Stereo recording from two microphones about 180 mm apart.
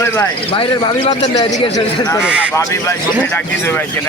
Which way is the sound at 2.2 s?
5° right (ahead or behind).